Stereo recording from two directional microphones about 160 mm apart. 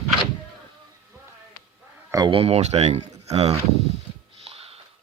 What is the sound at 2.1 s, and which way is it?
Speech, 25° right (ahead or behind).